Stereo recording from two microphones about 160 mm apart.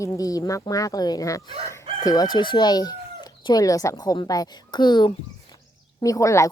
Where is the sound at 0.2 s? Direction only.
20° left (ahead or behind).